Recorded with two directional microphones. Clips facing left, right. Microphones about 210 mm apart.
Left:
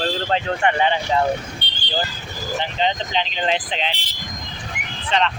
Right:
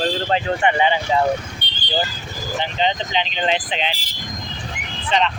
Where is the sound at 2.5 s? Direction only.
Centre (ahead or behind).